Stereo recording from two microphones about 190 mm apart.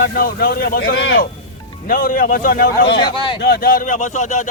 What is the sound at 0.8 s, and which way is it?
Speech, 70° left (ahead or behind).